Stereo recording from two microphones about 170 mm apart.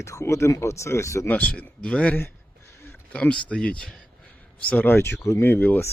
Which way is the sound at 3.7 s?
5° left (ahead or behind).